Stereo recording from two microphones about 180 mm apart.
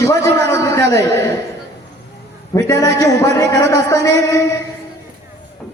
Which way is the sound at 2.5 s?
15° left (ahead or behind).